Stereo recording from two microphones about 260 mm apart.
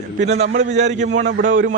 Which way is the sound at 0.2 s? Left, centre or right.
Right.